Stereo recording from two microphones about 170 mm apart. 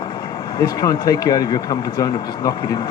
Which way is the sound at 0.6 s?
20° left (ahead or behind).